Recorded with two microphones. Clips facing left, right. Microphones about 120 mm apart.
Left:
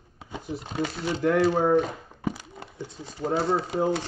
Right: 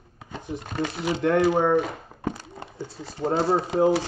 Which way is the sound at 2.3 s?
10° left (ahead or behind).